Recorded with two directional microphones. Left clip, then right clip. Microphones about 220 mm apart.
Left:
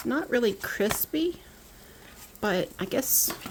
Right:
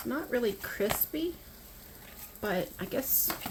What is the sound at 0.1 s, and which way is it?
Speech, 45° left (ahead or behind).